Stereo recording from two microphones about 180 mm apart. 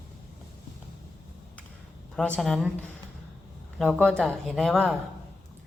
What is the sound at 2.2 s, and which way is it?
Speech, 5° left (ahead or behind).